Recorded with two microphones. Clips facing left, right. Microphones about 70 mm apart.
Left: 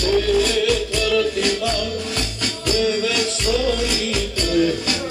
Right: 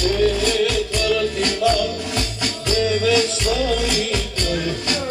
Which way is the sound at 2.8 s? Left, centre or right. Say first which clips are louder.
Right 3 dB; centre.